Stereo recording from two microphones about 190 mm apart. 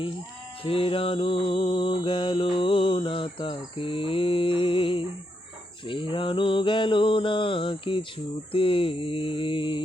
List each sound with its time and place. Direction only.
0.6 s music: 30° left (ahead or behind)